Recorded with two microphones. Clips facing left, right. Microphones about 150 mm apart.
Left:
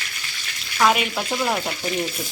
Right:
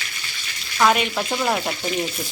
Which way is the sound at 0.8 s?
5° left (ahead or behind).